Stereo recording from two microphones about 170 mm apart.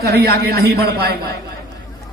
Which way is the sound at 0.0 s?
65° right (ahead or behind).